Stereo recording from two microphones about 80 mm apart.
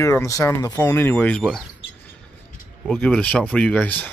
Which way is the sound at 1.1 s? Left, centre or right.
Centre.